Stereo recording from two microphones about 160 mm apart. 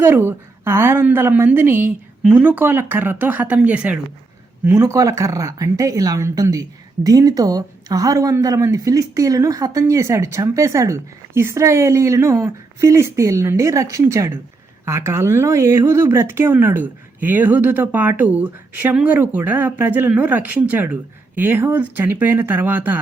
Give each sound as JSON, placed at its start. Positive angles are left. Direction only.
{"t": 0.0, "sound": "speech", "side_deg": -15}